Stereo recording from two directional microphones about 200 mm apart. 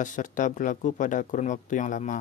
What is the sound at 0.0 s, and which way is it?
A man's voice, 40° left (ahead or behind).